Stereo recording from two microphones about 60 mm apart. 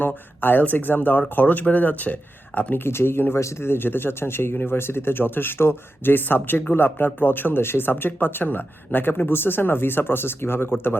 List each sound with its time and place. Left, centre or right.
0.0 s speech: left
2.8 s speech: left